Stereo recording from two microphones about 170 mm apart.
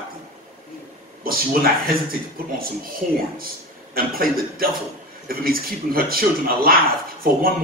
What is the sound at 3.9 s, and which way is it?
Speech, 60° right (ahead or behind).